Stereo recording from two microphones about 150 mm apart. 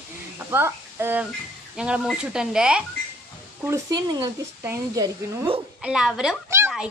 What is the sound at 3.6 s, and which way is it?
Speech, 20° right (ahead or behind).